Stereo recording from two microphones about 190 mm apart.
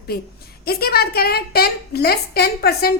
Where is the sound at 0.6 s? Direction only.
55° left (ahead or behind).